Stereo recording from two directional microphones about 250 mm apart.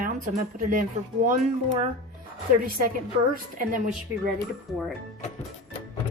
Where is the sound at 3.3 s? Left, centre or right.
Right.